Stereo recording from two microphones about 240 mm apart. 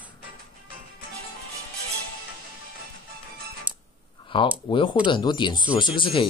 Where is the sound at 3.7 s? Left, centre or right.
Centre.